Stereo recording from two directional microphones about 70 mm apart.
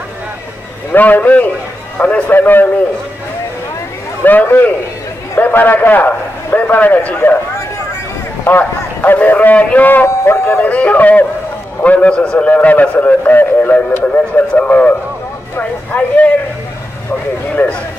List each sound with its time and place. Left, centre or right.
0.9 s a man's voice: left
4.2 s a man's voice: left
8.5 s a man's voice: left
10.0 s speech: left
10.6 s a man's voice: left
17.6 s speech: centre